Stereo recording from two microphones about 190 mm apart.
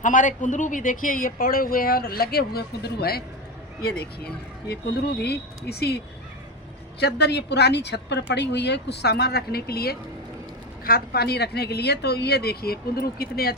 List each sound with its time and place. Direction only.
0.0 s speech: 45° left (ahead or behind)
4.7 s a woman's voice: 60° left (ahead or behind)
7.0 s a woman's voice: 60° left (ahead or behind)